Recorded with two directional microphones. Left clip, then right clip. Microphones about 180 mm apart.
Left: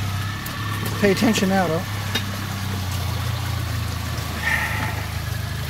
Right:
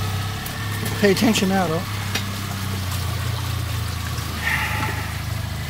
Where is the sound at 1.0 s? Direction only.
15° right (ahead or behind).